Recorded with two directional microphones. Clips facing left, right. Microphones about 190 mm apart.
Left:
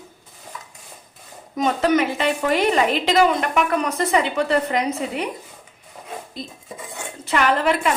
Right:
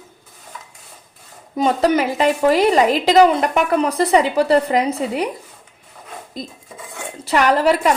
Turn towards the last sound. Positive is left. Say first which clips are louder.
# right 4 dB
turn(degrees=-40)  # may be behind; listen again after turning